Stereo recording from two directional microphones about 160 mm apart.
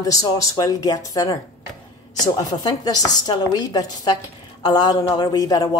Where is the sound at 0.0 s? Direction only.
20° left (ahead or behind).